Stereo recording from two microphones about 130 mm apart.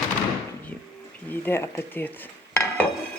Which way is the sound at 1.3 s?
15° left (ahead or behind).